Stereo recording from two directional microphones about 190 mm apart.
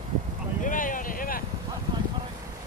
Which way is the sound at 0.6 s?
45° left (ahead or behind).